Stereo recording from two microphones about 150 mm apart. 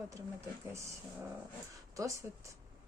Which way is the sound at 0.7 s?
20° right (ahead or behind).